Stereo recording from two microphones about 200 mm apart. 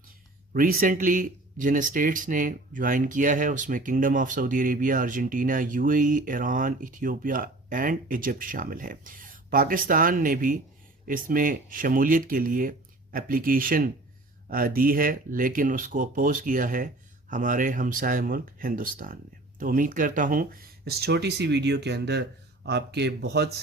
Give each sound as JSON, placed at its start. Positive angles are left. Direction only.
{"t": 0.5, "sound": "speech", "side_deg": -45}